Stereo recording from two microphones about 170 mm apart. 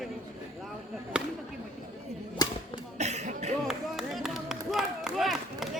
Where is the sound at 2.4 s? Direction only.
20° left (ahead or behind).